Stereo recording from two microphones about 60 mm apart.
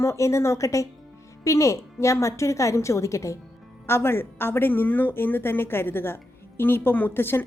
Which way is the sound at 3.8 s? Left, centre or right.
Left.